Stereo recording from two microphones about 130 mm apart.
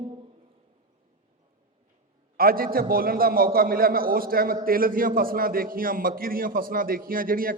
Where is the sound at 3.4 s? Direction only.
90° right.